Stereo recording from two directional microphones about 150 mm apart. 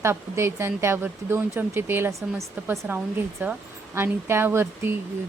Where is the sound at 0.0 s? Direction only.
15° right (ahead or behind).